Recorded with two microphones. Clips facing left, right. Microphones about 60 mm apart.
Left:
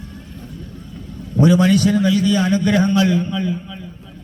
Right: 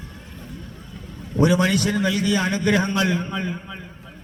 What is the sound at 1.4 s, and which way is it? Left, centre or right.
A man's voice, centre.